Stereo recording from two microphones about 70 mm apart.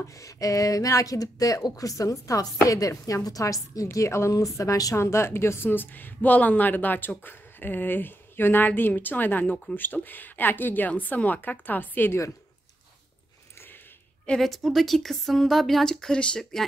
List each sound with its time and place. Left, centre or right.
0.0 s a woman's voice: left
4.9 s speech: left
14.4 s speech: centre